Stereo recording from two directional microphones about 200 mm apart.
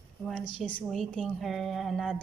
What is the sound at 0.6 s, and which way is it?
A woman's voice, 5° left (ahead or behind).